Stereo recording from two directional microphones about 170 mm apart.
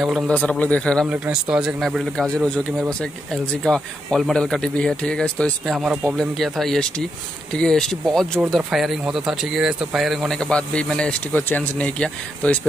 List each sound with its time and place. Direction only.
0.0 s speech: 5° right (ahead or behind)
0.3 s a man's voice: 10° left (ahead or behind)
1.1 s speech: 10° right (ahead or behind)
3.6 s speech: centre (ahead or behind)